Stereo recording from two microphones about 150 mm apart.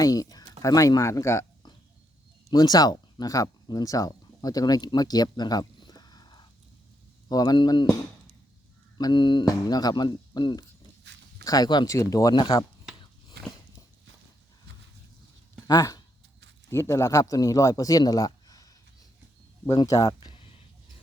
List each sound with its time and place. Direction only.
0.0 s speech: 25° left (ahead or behind)
9.0 s speech: 30° left (ahead or behind)
15.6 s a man's voice: 25° left (ahead or behind)